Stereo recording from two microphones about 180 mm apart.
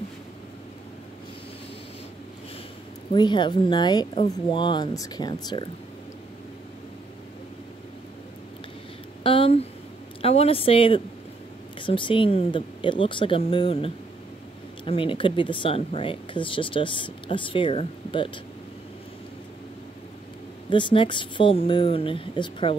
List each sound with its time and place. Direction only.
3.1 s speech: 25° left (ahead or behind)
9.2 s a sound: 30° left (ahead or behind)
10.2 s speech: 35° left (ahead or behind)
20.7 s speech: 25° left (ahead or behind)